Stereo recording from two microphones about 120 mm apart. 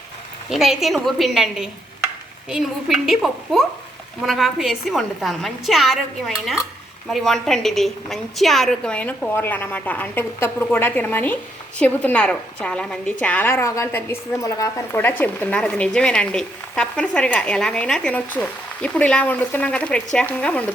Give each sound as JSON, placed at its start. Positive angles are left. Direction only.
{"t": 0.5, "sound": "a woman's voice", "side_deg": 0}